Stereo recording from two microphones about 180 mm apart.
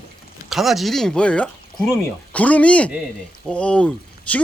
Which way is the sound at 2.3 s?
10° left (ahead or behind).